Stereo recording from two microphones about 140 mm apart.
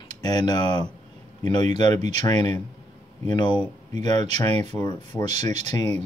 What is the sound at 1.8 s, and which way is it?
Speech, 50° right (ahead or behind).